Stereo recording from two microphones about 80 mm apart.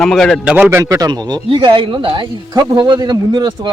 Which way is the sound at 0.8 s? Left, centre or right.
Right.